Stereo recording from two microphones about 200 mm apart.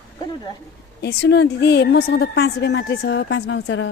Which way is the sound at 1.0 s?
55° left (ahead or behind).